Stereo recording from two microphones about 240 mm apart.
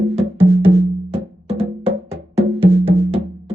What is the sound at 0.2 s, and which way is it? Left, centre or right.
Music, right.